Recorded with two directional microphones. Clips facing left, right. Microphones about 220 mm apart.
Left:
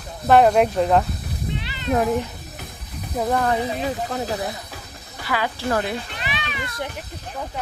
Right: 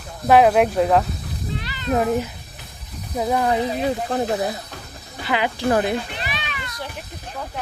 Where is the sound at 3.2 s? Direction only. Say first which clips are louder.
Right 1 dB; 10° right (ahead or behind).